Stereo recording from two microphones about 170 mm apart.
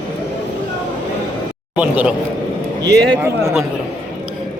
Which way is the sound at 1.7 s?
10° right (ahead or behind).